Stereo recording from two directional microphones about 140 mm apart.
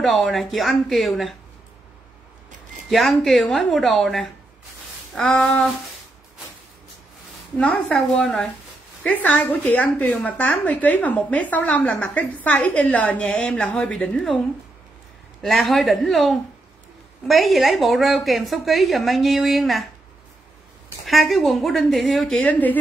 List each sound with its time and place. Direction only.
0.0 s a woman's voice: centre (ahead or behind)
2.9 s a woman's voice: centre (ahead or behind)
7.5 s a woman's voice: 10° left (ahead or behind)
15.4 s a woman's voice: centre (ahead or behind)
21.0 s a woman's voice: centre (ahead or behind)